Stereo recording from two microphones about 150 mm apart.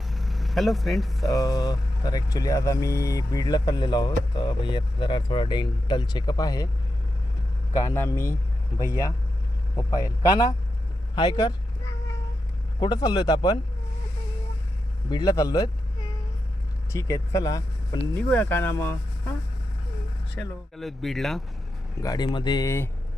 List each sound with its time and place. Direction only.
0.1 s speech: centre (ahead or behind)
1.4 s speech: 25° left (ahead or behind)
7.7 s speech: 20° left (ahead or behind)
12.8 s speech: 25° left (ahead or behind)
15.1 s speech: 25° left (ahead or behind)
18.1 s speech: 10° left (ahead or behind)
20.4 s speech: 10° left (ahead or behind)
21.9 s speech: 25° left (ahead or behind)